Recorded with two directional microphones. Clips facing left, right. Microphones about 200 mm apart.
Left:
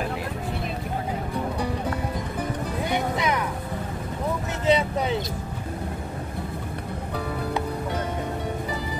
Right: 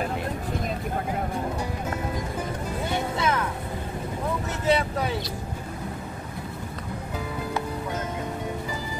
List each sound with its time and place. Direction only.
2.8 s music: 15° left (ahead or behind)
4.6 s boat: 20° left (ahead or behind)